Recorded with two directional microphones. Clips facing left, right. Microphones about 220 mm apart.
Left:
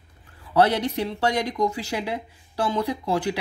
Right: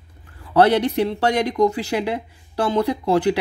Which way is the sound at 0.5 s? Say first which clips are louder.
Right 5 dB; 60° right (ahead or behind).